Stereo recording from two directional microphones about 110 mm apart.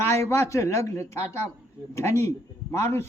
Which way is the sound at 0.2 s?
25° left (ahead or behind).